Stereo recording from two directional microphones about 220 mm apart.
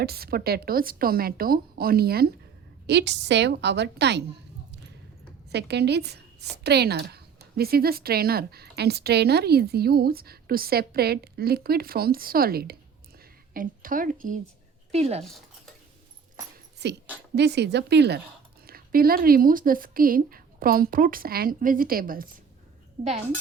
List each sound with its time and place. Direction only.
0.0 s a woman's voice: 45° right (ahead or behind)
5.5 s a woman's voice: 50° right (ahead or behind); by 15.2 s 30° right (ahead or behind)
16.8 s a woman's voice: 50° right (ahead or behind)